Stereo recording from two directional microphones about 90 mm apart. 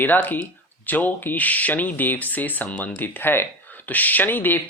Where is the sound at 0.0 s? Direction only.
20° left (ahead or behind).